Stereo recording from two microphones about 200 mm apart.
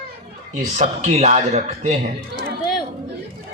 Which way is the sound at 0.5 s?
35° right (ahead or behind).